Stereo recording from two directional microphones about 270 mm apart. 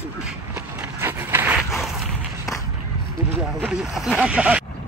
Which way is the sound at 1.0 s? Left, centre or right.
Centre.